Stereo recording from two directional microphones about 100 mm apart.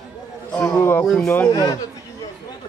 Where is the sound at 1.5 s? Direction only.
35° left (ahead or behind).